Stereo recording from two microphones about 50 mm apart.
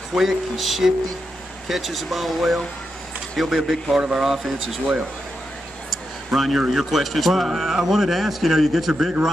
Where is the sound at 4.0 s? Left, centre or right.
Centre.